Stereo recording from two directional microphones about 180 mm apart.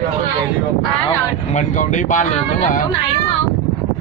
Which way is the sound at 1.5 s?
45° left (ahead or behind).